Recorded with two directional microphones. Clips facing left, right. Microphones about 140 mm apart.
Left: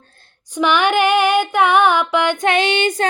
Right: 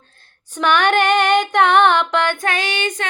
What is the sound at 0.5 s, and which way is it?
Female singing, 10° left (ahead or behind).